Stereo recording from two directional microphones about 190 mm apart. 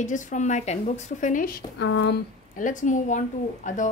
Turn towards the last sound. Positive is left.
turn(degrees=40)  # may be behind; listen again after turning